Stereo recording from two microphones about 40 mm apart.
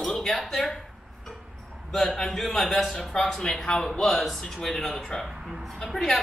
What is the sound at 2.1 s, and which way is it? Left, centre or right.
Speech, centre.